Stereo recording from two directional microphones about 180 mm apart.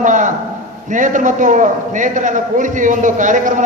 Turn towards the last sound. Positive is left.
turn(degrees=-45)  # may be behind; listen again after turning